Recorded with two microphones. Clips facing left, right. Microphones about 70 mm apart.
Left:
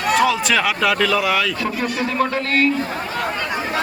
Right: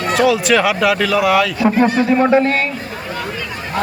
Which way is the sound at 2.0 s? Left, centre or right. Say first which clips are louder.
Right 8 dB; centre.